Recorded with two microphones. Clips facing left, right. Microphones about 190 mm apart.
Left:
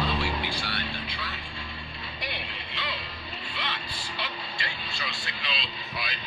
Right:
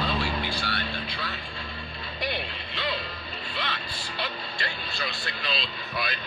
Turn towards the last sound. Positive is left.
turn(degrees=-55)  # may be behind; listen again after turning